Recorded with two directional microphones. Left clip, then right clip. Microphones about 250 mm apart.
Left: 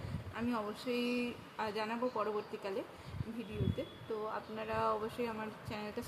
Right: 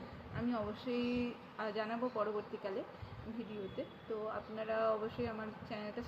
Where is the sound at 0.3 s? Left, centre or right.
Centre.